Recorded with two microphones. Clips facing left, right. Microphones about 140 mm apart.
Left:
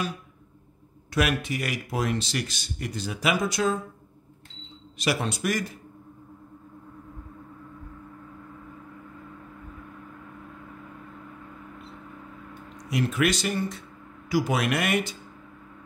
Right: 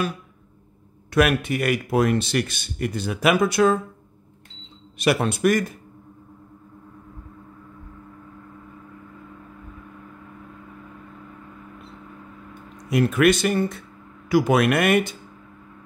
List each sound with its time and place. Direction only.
1.1 s speech: 55° right (ahead or behind)
4.9 s speech: 55° right (ahead or behind)
12.9 s speech: 55° right (ahead or behind)